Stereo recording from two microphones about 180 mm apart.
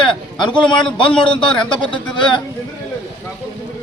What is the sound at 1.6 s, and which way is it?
Speech, 25° left (ahead or behind).